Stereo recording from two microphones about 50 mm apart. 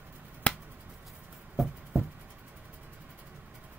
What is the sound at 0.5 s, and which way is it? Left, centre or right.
Finger snapping, left.